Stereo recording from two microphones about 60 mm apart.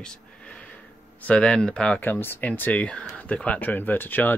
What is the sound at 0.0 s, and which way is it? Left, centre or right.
Speech, centre.